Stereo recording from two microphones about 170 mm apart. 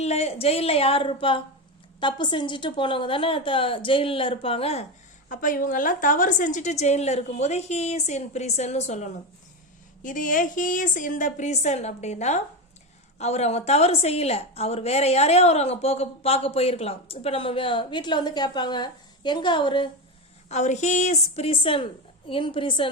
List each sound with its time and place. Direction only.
0.0 s a woman's voice: 40° left (ahead or behind)
5.3 s a woman's voice: 50° left (ahead or behind); by 19.9 s 30° left (ahead or behind)
20.5 s a woman's voice: 45° left (ahead or behind)